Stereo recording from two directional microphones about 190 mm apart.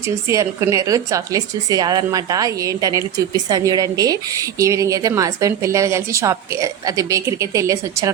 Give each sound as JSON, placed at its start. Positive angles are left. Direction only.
{"t": 0.0, "sound": "speech", "side_deg": -15}